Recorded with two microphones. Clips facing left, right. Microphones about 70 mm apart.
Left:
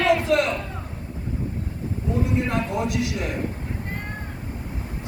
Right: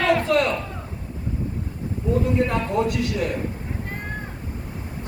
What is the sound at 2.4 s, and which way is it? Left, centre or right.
Speech, centre.